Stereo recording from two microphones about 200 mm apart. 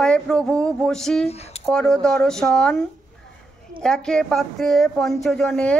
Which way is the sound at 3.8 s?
5° left (ahead or behind).